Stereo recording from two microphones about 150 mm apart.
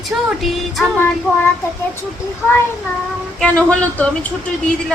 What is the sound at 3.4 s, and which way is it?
Speech, 5° left (ahead or behind).